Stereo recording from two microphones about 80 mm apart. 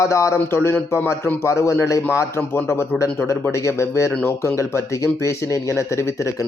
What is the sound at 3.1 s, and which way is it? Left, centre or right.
Speech, left.